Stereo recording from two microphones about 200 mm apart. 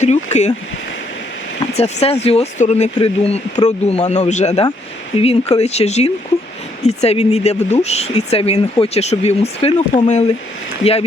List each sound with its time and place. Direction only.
0.0 s speech: 35° left (ahead or behind)
1.7 s speech: 30° left (ahead or behind)